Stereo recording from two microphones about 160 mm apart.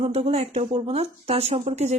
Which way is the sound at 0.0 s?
40° right (ahead or behind).